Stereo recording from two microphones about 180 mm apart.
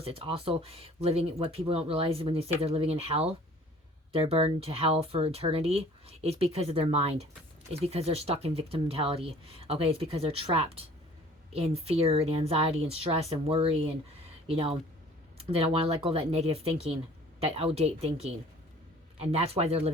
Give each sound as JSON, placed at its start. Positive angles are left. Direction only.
{"t": 0.0, "sound": "speech", "side_deg": -30}